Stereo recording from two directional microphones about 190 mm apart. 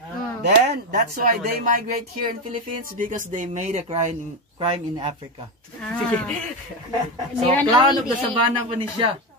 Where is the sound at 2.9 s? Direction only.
45° right (ahead or behind).